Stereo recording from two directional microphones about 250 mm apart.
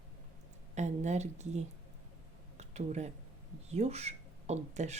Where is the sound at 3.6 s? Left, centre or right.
Right.